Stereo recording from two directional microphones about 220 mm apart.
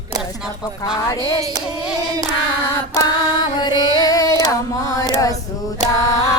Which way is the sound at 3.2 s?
20° left (ahead or behind).